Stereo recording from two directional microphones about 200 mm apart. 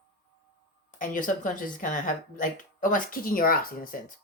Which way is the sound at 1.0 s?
40° left (ahead or behind).